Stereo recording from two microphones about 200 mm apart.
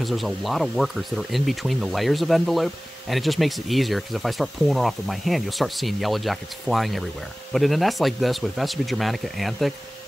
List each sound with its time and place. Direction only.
0.0 s speech: centre (ahead or behind)